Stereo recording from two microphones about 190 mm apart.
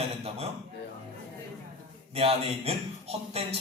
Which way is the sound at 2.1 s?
30° right (ahead or behind).